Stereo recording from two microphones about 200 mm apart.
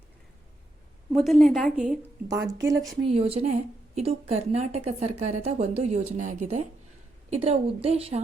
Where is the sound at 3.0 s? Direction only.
30° right (ahead or behind).